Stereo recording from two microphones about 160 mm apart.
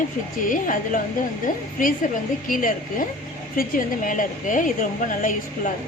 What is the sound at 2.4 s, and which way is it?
A woman's voice, 55° left (ahead or behind).